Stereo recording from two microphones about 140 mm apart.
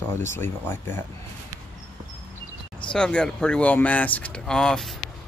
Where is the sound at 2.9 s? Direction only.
5° left (ahead or behind).